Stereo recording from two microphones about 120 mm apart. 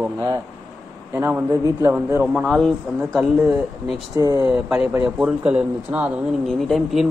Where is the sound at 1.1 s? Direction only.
20° right (ahead or behind).